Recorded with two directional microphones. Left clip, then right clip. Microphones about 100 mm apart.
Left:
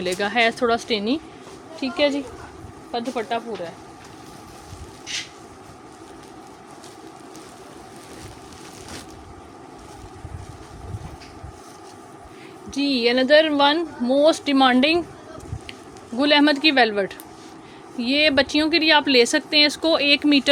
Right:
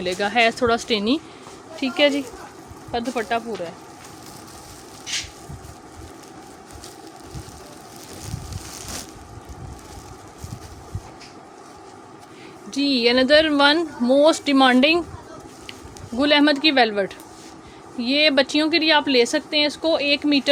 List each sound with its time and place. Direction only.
0.0 s speech: 10° left (ahead or behind); by 3.7 s 15° right (ahead or behind)
12.7 s speech: 10° right (ahead or behind)
16.1 s speech: 5° right (ahead or behind)
19.1 s speech: 20° left (ahead or behind)
19.7 s speech: 40° left (ahead or behind)